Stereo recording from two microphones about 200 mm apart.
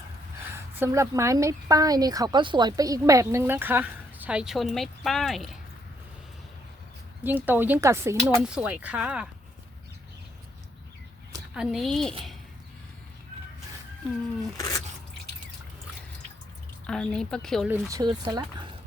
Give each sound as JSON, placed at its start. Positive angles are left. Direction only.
{"t": 0.5, "sound": "a woman's voice", "side_deg": -15}
{"t": 7.3, "sound": "a woman's voice", "side_deg": -10}
{"t": 11.5, "sound": "speech", "side_deg": 0}
{"t": 16.8, "sound": "speech", "side_deg": 5}
{"t": 17.7, "sound": "a woman's voice", "side_deg": -15}